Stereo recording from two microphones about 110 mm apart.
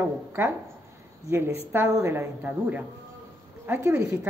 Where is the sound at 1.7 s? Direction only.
25° right (ahead or behind).